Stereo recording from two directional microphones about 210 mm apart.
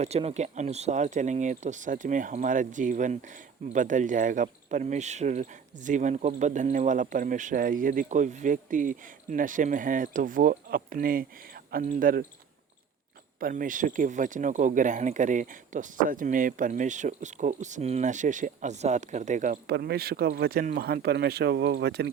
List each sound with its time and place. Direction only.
0.0 s speech: 30° right (ahead or behind)
13.4 s speech: 40° right (ahead or behind)
19.7 s speech: 50° right (ahead or behind)